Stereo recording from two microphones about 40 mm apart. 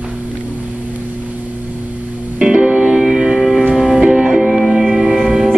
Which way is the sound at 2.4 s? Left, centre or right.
Right.